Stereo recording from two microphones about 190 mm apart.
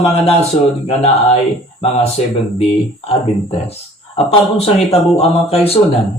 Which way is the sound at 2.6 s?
30° left (ahead or behind).